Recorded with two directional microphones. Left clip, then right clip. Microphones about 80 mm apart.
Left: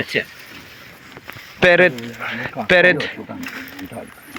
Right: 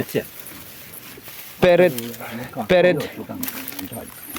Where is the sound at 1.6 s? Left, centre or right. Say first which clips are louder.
Left 2 dB; right.